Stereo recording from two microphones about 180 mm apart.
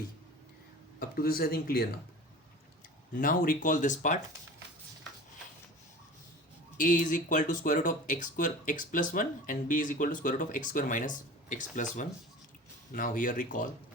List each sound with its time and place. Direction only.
0.9 s speech: 55° left (ahead or behind)
3.1 s speech: 50° left (ahead or behind)
6.7 s speech: 45° left (ahead or behind)